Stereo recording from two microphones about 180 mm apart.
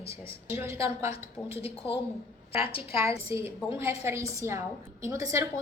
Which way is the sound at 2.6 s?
30° left (ahead or behind).